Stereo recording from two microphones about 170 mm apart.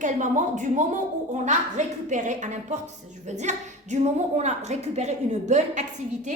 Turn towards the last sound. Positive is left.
turn(degrees=-45)  # may be behind; listen again after turning